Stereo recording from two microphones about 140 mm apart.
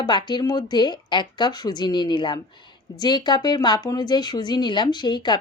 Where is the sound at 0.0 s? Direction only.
30° left (ahead or behind).